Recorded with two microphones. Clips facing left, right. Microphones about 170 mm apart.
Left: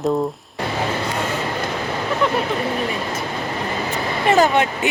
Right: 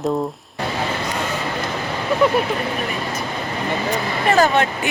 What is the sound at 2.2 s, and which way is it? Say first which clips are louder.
Speech: right 4 dB; 5° right (ahead or behind).